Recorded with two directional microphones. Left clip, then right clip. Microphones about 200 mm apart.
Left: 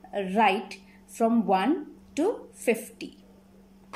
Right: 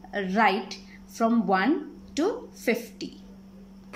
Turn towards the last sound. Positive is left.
turn(degrees=10)  # may be behind; listen again after turning